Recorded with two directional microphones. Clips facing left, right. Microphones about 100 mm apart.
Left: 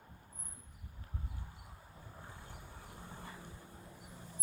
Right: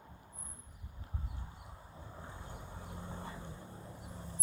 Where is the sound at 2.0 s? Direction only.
25° right (ahead or behind).